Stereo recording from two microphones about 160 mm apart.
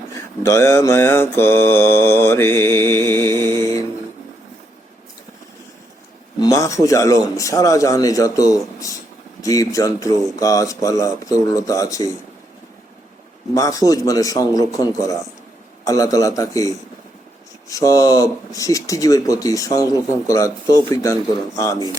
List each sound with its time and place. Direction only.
0.4 s mantra: 15° left (ahead or behind)
6.4 s speech: 20° left (ahead or behind)
13.5 s speech: 20° left (ahead or behind)